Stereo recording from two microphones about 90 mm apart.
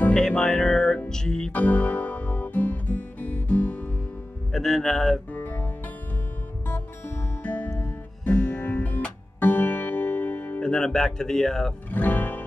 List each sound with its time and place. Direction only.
0.0 s music: 10° left (ahead or behind)
4.5 s speech: centre (ahead or behind)
5.3 s music: 20° left (ahead or behind)
7.4 s music: 20° left (ahead or behind)
11.9 s music: 20° left (ahead or behind)